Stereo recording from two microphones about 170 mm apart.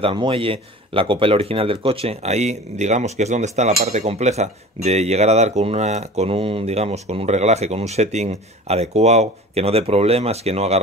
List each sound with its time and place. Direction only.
0.0 s speech: 30° right (ahead or behind)